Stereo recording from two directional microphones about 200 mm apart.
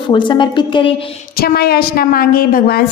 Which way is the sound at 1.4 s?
50° left (ahead or behind).